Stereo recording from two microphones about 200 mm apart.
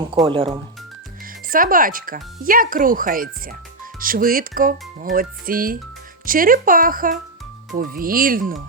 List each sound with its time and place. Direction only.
0.3 s speech: 25° right (ahead or behind)
1.2 s speech: 45° right (ahead or behind)